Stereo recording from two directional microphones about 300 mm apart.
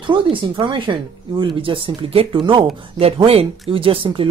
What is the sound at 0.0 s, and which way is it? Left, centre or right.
Speech, centre.